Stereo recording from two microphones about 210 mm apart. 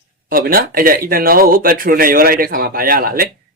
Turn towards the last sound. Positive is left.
turn(degrees=-45)  # may be behind; listen again after turning